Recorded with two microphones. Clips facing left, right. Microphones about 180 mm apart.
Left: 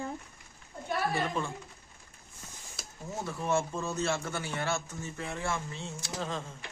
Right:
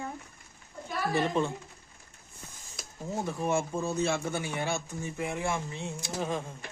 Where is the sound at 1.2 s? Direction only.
20° right (ahead or behind).